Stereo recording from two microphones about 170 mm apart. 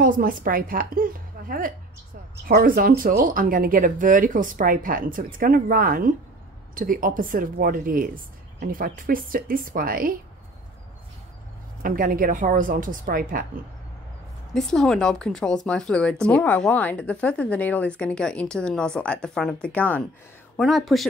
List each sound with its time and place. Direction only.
0.0 s speech: 55° right (ahead or behind)
11.8 s a woman's voice: 55° right (ahead or behind)
14.5 s speech: 5° left (ahead or behind)